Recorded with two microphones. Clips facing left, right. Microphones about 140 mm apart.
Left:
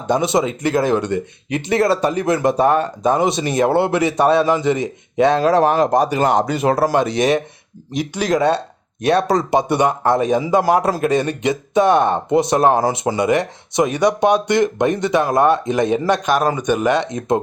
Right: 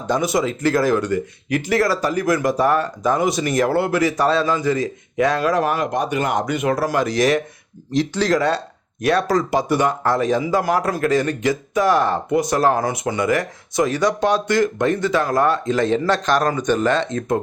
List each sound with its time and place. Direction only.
0.1 s speech: 25° left (ahead or behind)